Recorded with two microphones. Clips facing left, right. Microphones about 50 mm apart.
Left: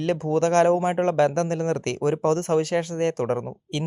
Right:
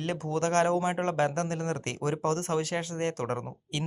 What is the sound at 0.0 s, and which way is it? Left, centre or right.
Speech, left.